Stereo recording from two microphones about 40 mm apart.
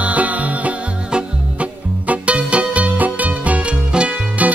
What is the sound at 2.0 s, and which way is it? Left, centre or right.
Music, right.